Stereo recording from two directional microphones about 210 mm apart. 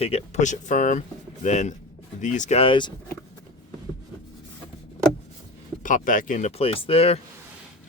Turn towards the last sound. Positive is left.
turn(degrees=30)  # may be behind; listen again after turning